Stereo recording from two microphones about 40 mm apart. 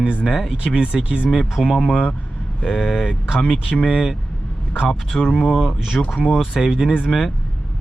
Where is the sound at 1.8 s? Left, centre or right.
Left.